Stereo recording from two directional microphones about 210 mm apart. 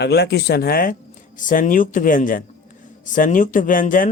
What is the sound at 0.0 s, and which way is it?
Speech, 50° left (ahead or behind).